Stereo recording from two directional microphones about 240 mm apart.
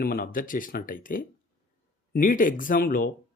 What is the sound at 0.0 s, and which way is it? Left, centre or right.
Speech, left.